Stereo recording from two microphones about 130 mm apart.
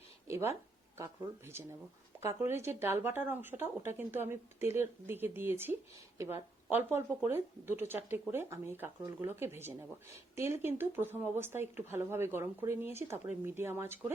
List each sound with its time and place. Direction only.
0.3 s speech: 20° right (ahead or behind)